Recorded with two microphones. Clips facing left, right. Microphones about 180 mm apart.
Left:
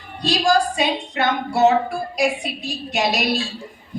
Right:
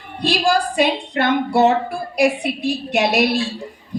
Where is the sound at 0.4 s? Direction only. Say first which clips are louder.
Right 1 dB; 60° right (ahead or behind).